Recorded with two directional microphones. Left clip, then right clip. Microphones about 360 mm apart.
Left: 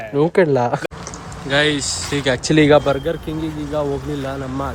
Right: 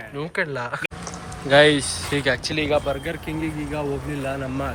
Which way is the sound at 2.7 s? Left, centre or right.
Left.